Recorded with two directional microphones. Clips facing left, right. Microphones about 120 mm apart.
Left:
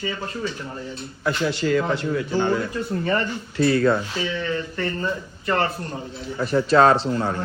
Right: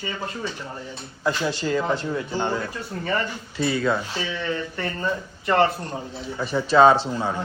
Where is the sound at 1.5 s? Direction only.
25° right (ahead or behind).